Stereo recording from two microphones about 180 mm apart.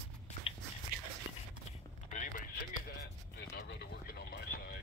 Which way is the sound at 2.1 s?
45° left (ahead or behind).